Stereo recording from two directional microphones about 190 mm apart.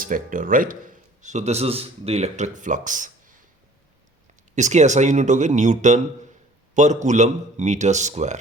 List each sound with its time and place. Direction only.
0.0 s speech: 45° right (ahead or behind)
4.5 s speech: 40° right (ahead or behind)